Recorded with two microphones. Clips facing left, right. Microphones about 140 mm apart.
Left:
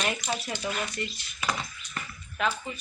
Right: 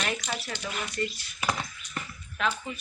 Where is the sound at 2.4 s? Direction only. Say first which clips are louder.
Left 1 dB; 5° left (ahead or behind).